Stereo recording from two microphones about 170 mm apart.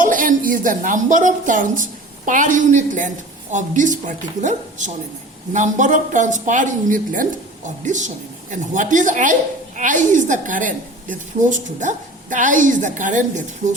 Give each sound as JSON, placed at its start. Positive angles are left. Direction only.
{"t": 0.0, "sound": "a woman's voice", "side_deg": -50}